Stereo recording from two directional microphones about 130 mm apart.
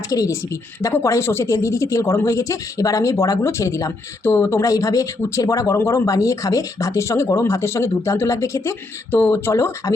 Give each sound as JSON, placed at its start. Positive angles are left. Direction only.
{"t": 0.1, "sound": "speech", "side_deg": 25}